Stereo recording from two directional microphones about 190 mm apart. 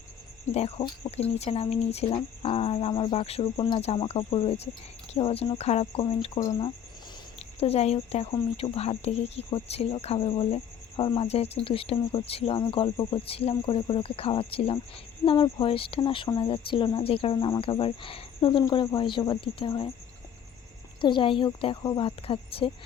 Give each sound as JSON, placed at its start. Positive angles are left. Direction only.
{"t": 0.5, "sound": "speech", "side_deg": 30}
{"t": 21.0, "sound": "speech", "side_deg": 25}